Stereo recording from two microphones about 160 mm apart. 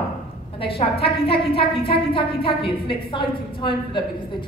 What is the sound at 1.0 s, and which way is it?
A woman's voice, 35° left (ahead or behind).